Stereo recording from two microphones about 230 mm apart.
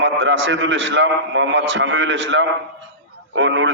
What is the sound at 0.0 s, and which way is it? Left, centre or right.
A man's voice, right.